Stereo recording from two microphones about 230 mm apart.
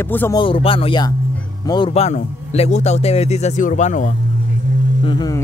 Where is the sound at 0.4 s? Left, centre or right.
Left.